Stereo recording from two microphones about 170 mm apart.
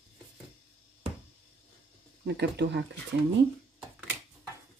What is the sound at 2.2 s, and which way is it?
Speech, 90° right.